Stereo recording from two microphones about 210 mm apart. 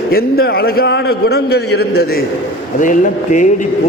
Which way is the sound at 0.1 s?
45° left (ahead or behind).